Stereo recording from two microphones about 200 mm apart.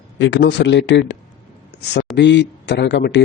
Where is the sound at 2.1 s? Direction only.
60° left (ahead or behind).